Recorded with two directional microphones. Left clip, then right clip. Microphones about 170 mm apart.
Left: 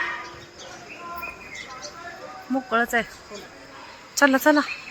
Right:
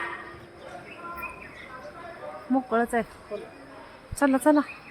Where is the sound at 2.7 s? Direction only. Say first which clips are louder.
Left 5 dB; 15° right (ahead or behind).